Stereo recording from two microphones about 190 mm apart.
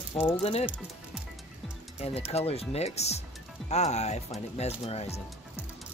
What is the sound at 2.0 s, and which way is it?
Speech, 35° left (ahead or behind).